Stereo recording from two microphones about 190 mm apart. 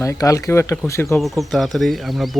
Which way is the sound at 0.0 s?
15° left (ahead or behind).